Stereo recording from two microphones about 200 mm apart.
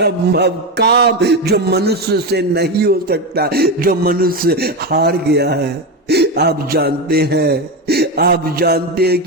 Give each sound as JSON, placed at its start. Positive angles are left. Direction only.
{"t": 0.0, "sound": "mantra", "side_deg": -55}